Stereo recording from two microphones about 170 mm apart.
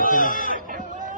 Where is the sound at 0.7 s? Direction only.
50° right (ahead or behind).